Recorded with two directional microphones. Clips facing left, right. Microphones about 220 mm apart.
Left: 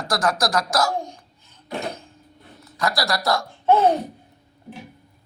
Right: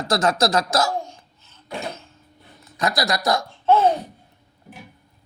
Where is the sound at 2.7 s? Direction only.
20° right (ahead or behind).